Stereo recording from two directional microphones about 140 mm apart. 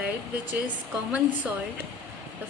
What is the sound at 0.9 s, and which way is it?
Speech, 10° right (ahead or behind).